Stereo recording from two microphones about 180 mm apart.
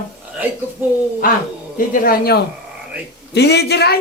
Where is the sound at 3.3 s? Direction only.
70° left (ahead or behind).